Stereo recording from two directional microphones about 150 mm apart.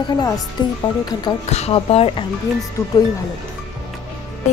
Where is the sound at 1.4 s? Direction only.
45° left (ahead or behind).